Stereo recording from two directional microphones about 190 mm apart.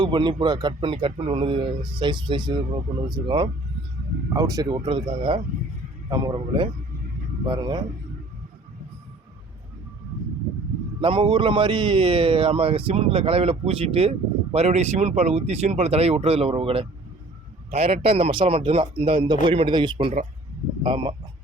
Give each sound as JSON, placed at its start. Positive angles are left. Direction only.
{"t": 0.0, "sound": "speech", "side_deg": -25}
{"t": 11.0, "sound": "a man's voice", "side_deg": -25}